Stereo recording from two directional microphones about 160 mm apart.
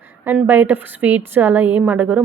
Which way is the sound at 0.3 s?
10° right (ahead or behind).